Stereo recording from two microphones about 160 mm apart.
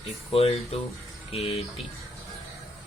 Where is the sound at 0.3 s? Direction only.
40° left (ahead or behind).